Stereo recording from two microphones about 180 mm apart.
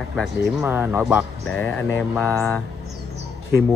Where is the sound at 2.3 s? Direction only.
15° right (ahead or behind).